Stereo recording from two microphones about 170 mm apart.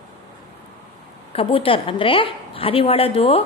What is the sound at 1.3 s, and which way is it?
A woman's voice, 30° left (ahead or behind).